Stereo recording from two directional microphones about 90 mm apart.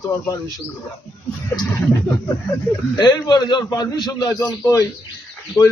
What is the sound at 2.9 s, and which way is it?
A man's voice, 55° left (ahead or behind).